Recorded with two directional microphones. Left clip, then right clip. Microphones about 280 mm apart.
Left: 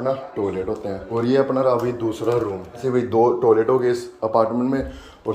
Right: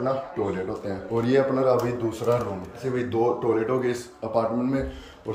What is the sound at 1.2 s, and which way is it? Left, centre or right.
Speech, centre.